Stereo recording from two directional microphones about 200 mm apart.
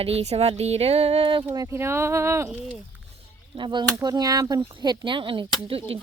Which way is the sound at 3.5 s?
25° right (ahead or behind).